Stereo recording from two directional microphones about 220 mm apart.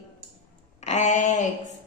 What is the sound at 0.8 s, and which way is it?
Speech, 30° left (ahead or behind).